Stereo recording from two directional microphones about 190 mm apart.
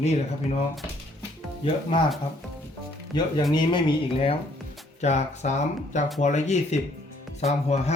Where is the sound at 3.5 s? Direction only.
25° left (ahead or behind).